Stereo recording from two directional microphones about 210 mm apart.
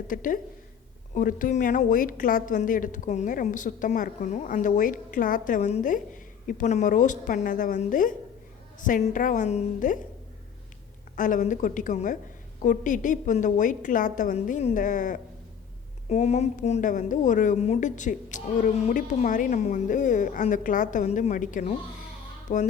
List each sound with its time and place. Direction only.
0.1 s a woman's voice: 40° left (ahead or behind)
11.2 s a woman's voice: 40° left (ahead or behind)